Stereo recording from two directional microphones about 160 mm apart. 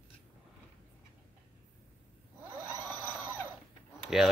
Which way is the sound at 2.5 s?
20° right (ahead or behind).